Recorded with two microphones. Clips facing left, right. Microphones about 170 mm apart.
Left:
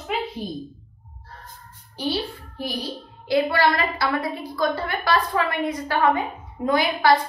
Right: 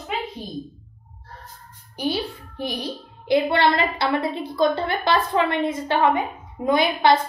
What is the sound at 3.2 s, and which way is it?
A woman's voice, 25° right (ahead or behind).